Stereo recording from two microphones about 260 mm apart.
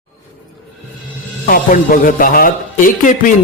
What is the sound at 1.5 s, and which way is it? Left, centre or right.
Speech, left.